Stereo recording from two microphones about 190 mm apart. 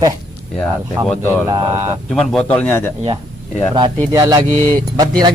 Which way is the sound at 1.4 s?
20° right (ahead or behind).